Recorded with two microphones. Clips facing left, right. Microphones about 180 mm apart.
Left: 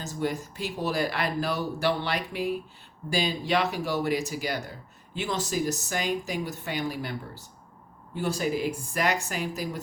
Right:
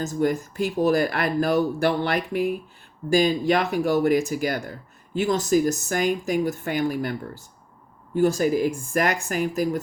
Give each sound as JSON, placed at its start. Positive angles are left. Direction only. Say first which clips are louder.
{"t": 0.0, "sound": "speech", "louder": "right 7 dB", "side_deg": -50}